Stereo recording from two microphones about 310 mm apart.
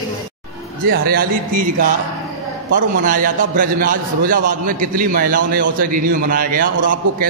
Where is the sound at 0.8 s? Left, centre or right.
Right.